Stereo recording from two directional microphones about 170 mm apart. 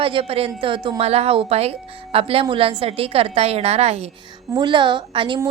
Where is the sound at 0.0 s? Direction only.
30° right (ahead or behind).